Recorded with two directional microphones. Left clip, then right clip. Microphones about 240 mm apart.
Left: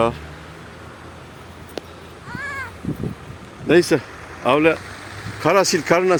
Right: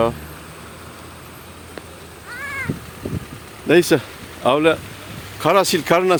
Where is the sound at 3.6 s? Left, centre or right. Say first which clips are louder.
Right 1 dB; centre.